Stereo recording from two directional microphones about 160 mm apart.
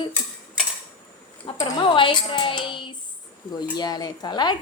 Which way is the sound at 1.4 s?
30° left (ahead or behind).